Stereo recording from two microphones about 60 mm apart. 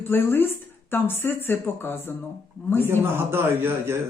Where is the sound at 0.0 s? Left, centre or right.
Left.